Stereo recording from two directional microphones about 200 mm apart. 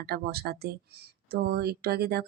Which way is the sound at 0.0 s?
50° right (ahead or behind).